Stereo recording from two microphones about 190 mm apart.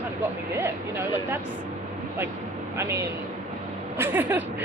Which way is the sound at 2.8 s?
15° right (ahead or behind).